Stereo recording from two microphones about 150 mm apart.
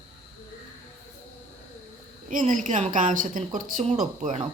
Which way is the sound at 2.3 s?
55° right (ahead or behind).